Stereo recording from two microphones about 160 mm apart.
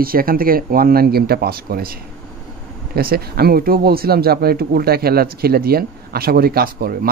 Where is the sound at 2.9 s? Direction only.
75° right (ahead or behind).